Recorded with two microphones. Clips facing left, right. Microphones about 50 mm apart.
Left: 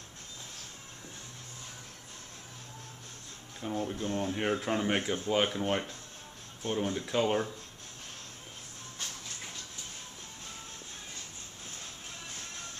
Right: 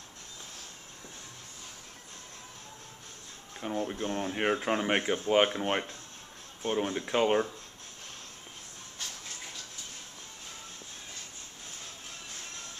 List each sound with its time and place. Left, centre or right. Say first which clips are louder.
3.6 s speech: right 1 dB; centre